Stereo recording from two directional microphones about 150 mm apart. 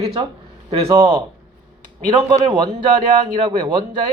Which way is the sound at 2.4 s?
30° right (ahead or behind).